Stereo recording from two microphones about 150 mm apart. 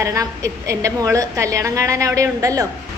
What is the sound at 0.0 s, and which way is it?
A woman's voice, 20° right (ahead or behind).